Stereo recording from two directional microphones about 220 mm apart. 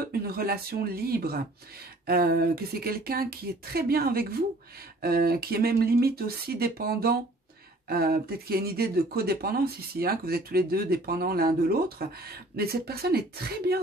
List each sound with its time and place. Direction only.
0.0 s speech: 45° right (ahead or behind)